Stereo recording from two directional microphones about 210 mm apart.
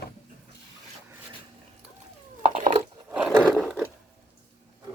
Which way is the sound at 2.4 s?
35° right (ahead or behind).